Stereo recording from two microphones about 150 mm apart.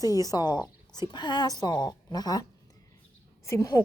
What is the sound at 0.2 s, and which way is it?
Speech, 25° left (ahead or behind).